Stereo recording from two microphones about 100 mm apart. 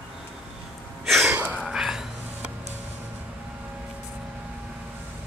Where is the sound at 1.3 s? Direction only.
15° right (ahead or behind).